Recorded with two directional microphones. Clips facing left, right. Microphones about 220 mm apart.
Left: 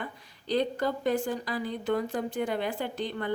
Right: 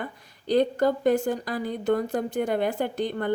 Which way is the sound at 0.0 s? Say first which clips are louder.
Right 4 dB; 45° right (ahead or behind).